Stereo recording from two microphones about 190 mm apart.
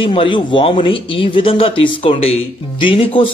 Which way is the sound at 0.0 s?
30° left (ahead or behind).